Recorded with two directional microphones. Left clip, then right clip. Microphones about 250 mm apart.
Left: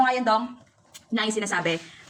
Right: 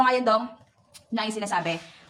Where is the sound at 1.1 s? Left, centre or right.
Centre.